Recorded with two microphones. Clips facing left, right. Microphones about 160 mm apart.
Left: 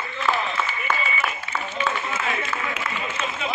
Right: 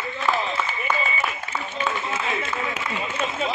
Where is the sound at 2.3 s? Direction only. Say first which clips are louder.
Right 1 dB; 20° right (ahead or behind).